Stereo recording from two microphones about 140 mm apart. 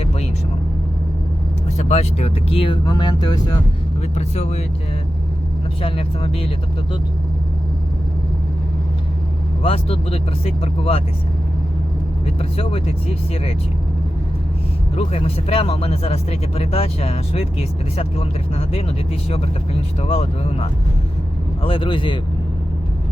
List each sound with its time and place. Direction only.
1.8 s speech: 55° left (ahead or behind); by 3.4 s 30° left (ahead or behind)
4.1 s speech: 50° left (ahead or behind)
5.8 s speech: 40° left (ahead or behind)
9.6 s speech: 45° left (ahead or behind)
12.2 s speech: 45° left (ahead or behind)
14.9 s speech: 45° left (ahead or behind)
20.0 s speech: 45° left (ahead or behind)